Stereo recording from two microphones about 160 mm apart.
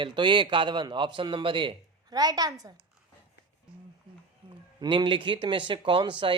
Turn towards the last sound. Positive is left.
turn(degrees=-30)  # may be behind; listen again after turning